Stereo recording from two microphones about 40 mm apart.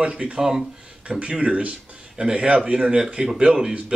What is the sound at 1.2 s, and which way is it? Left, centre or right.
Speech, right.